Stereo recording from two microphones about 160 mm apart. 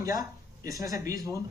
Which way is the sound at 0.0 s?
20° right (ahead or behind).